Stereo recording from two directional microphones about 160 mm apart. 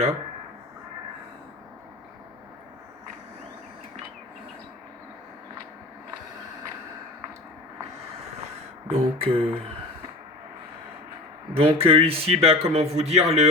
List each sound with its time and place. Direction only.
8.9 s a man's voice: 40° right (ahead or behind)
11.5 s a man's voice: 40° right (ahead or behind)